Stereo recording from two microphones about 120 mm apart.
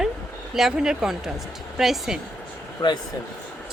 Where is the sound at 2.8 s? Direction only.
40° left (ahead or behind).